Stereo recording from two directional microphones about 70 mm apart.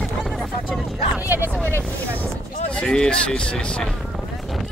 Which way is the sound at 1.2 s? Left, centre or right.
Right.